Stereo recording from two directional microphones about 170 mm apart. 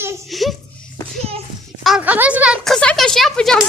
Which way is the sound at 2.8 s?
5° left (ahead or behind).